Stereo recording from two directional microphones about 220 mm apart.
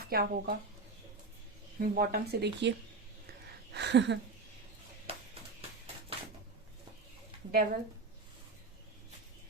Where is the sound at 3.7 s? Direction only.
50° right (ahead or behind).